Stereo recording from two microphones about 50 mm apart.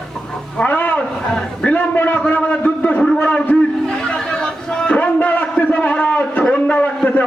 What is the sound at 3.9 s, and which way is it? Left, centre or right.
Chatter, centre.